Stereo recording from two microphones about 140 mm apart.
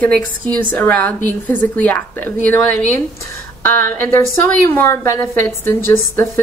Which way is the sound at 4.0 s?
20° left (ahead or behind).